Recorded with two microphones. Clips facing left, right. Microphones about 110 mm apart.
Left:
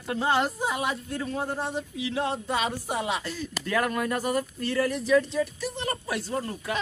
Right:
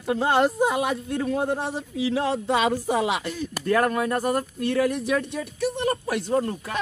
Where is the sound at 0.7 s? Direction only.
70° right (ahead or behind).